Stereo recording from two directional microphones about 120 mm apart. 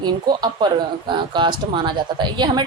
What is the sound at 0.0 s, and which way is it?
Speech, 35° right (ahead or behind).